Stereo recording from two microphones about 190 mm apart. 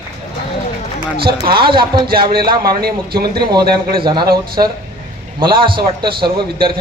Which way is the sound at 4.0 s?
25° right (ahead or behind).